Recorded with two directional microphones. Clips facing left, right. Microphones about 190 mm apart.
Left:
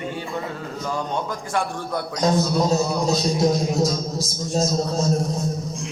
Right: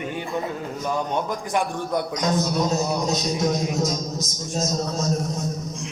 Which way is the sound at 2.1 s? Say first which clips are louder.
Left 6 dB; 30° left (ahead or behind).